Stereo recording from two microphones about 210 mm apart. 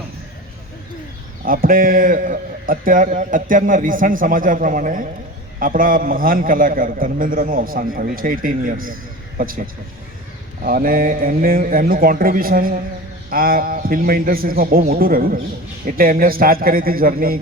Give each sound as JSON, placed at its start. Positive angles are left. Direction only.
{"t": 1.5, "sound": "a man's voice", "side_deg": -40}